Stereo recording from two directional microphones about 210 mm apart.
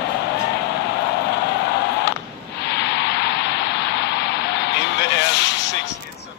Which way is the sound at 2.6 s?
55° left (ahead or behind).